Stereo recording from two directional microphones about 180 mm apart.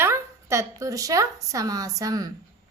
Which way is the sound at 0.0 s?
15° right (ahead or behind).